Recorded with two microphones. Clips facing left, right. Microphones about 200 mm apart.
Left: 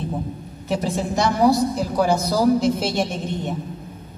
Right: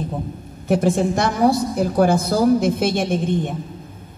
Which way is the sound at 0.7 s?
50° right (ahead or behind).